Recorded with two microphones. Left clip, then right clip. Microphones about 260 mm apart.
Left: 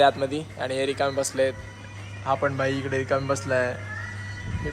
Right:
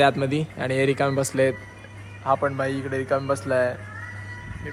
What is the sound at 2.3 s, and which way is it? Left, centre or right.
A man's voice, centre.